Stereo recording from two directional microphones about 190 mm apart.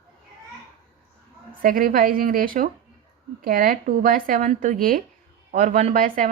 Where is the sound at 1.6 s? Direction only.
50° right (ahead or behind).